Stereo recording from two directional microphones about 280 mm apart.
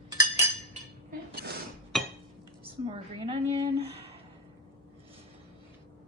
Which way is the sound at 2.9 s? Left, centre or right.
Centre.